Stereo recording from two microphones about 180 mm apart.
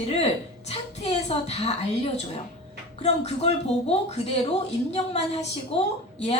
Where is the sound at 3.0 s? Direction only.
35° left (ahead or behind).